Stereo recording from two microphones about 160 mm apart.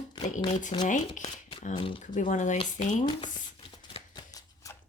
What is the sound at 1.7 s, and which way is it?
Speech, 30° left (ahead or behind).